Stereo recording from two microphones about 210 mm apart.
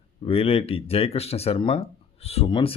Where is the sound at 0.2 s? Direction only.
30° left (ahead or behind).